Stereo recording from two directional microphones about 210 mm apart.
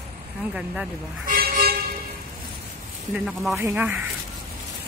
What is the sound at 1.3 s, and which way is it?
Toot, 45° right (ahead or behind).